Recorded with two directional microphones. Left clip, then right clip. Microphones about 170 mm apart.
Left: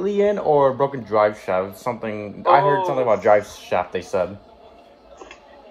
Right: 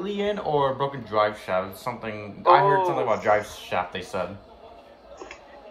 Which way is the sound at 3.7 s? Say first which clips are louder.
Left 6 dB; 25° left (ahead or behind).